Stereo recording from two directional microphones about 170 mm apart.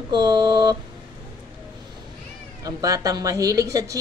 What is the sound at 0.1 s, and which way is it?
Speech, 25° right (ahead or behind).